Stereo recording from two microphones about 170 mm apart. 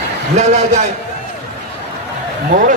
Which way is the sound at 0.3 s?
45° right (ahead or behind).